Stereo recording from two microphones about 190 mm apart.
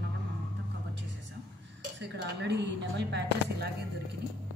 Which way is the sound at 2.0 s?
65° right (ahead or behind).